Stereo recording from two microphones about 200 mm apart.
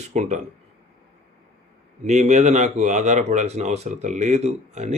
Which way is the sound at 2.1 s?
35° right (ahead or behind).